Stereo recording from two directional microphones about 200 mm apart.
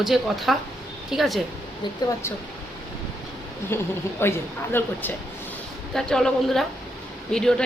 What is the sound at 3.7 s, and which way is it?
A woman's voice, 10° left (ahead or behind).